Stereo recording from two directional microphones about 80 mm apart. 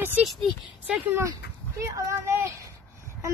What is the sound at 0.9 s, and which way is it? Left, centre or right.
Speech, centre.